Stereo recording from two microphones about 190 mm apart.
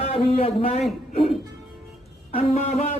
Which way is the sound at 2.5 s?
35° left (ahead or behind).